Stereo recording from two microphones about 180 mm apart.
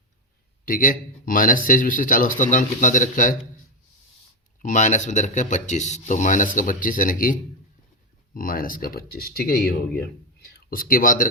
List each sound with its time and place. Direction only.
0.6 s speech: 50° left (ahead or behind)
4.6 s speech: 40° left (ahead or behind)